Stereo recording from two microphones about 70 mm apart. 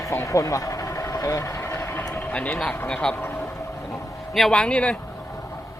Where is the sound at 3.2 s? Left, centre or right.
Left.